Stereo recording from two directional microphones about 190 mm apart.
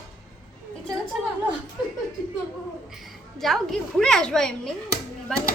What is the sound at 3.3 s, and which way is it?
A woman's voice, centre (ahead or behind).